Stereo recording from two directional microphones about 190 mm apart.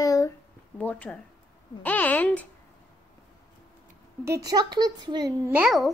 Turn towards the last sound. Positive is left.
turn(degrees=-5)  # may be behind; listen again after turning